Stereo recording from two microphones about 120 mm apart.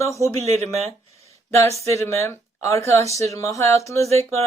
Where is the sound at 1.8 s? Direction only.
25° left (ahead or behind).